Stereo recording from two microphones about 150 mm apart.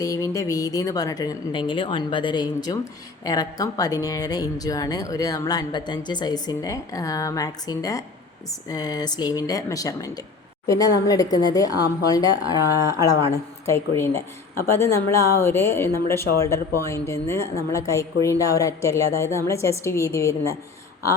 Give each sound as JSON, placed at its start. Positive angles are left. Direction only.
{"t": 0.0, "sound": "a woman's voice", "side_deg": 20}